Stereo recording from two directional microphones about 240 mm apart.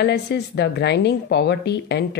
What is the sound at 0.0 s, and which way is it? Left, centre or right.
Speech, left.